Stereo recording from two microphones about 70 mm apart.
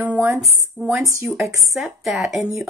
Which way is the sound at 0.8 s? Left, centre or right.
Centre.